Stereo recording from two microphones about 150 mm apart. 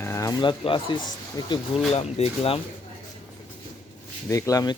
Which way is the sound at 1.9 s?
45° left (ahead or behind).